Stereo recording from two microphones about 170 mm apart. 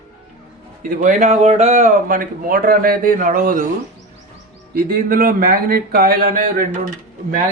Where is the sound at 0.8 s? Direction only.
50° right (ahead or behind).